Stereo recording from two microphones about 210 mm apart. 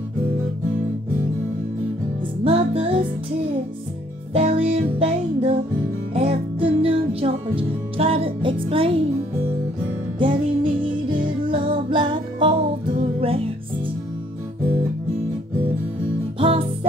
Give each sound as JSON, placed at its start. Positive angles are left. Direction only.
{"t": 2.4, "sound": "music", "side_deg": -30}
{"t": 4.6, "sound": "music", "side_deg": -25}
{"t": 10.1, "sound": "music", "side_deg": -25}
{"t": 16.3, "sound": "music", "side_deg": -25}